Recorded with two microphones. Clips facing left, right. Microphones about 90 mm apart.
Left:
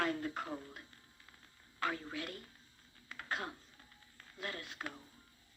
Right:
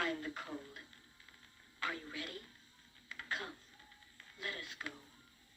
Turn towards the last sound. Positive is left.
turn(degrees=45)  # may be behind; listen again after turning